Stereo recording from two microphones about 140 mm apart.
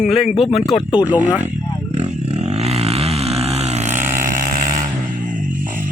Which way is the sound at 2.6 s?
50° right (ahead or behind).